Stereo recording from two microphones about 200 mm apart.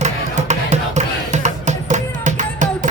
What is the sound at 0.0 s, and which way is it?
Music, 35° right (ahead or behind).